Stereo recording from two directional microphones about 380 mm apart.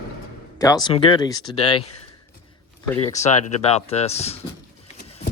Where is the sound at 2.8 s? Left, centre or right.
Centre.